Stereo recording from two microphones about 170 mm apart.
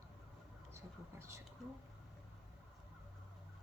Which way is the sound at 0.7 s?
15° right (ahead or behind).